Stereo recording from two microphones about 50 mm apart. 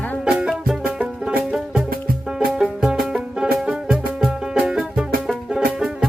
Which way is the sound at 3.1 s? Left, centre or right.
Centre.